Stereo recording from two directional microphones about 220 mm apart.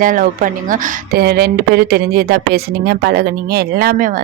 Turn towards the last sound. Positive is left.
turn(degrees=-40)  # may be behind; listen again after turning